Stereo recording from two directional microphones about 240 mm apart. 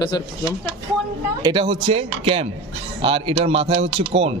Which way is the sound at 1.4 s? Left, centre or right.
Centre.